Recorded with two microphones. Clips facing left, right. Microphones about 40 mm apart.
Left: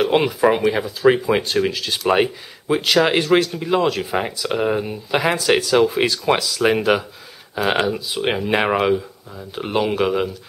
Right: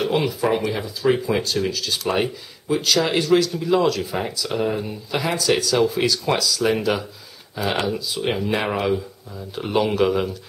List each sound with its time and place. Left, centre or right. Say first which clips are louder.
0.1 s speech: left 4 dB; left
7.8 s speech: left 3 dB; centre
9.8 s speech: even; centre